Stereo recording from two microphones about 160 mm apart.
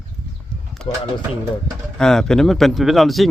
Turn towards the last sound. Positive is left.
turn(degrees=0)  # may be behind; listen again after turning